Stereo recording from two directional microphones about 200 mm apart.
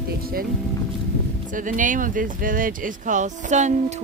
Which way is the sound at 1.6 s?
40° right (ahead or behind).